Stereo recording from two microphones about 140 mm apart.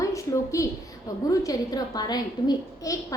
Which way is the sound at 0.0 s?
25° left (ahead or behind).